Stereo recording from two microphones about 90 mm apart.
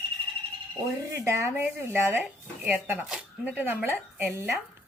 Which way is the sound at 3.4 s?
15° right (ahead or behind).